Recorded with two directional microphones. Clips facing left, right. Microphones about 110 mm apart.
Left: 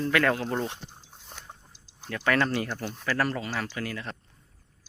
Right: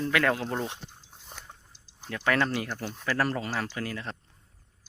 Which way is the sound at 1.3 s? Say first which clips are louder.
Even; 5° right (ahead or behind).